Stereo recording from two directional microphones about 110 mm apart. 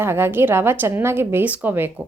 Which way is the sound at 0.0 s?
20° right (ahead or behind).